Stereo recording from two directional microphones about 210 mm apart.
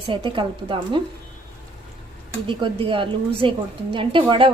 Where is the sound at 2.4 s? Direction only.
25° right (ahead or behind).